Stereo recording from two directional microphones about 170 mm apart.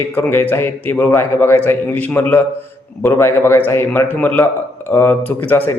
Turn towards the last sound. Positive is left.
turn(degrees=15)  # may be behind; listen again after turning